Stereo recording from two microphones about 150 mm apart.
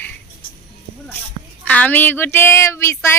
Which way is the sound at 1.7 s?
10° left (ahead or behind).